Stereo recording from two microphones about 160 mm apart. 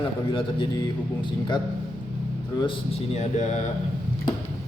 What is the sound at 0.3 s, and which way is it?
Speech, 30° left (ahead or behind).